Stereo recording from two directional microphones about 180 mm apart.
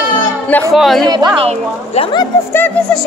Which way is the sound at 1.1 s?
25° right (ahead or behind).